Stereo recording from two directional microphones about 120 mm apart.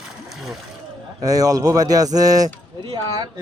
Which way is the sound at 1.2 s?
30° right (ahead or behind).